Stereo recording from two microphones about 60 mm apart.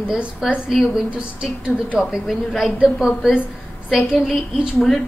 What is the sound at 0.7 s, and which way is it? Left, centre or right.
A woman's voice, centre.